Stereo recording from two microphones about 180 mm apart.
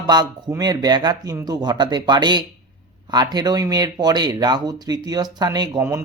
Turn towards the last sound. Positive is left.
turn(degrees=-15)  # may be behind; listen again after turning